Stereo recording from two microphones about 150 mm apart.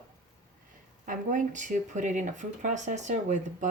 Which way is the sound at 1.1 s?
60° right (ahead or behind).